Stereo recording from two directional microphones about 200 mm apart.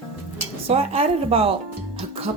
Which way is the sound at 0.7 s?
30° right (ahead or behind).